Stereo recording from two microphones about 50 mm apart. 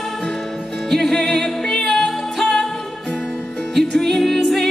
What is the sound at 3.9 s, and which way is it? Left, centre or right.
Music, centre.